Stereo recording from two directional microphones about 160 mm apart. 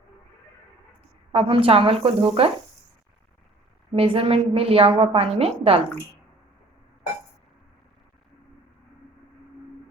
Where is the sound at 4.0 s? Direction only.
35° right (ahead or behind).